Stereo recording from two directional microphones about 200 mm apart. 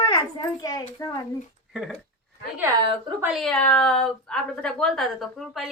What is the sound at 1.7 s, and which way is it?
Speech, centre (ahead or behind).